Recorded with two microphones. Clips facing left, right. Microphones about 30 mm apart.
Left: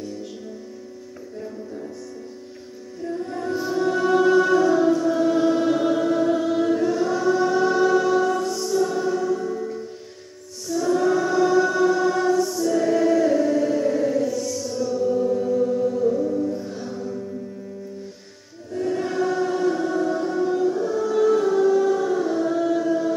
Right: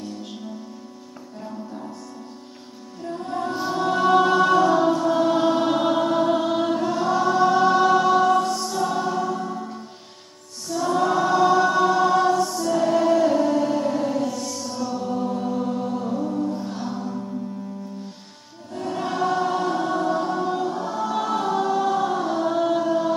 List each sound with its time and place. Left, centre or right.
0.0 s music: right
1.4 s music: centre
3.0 s music: right
10.7 s choir: right
18.7 s choir: right